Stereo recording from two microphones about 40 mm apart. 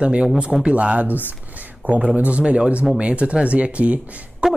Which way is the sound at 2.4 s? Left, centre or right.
Right.